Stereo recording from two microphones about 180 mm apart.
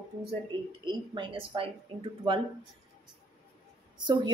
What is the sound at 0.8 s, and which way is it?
A woman's voice, 25° right (ahead or behind).